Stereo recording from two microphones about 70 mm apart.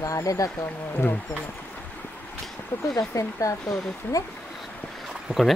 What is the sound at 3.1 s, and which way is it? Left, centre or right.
Speech, left.